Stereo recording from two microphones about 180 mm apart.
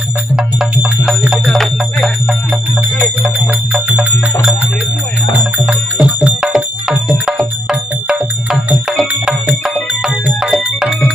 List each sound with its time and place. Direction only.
0.3 s music: 5° right (ahead or behind)
5.6 s music: 10° right (ahead or behind)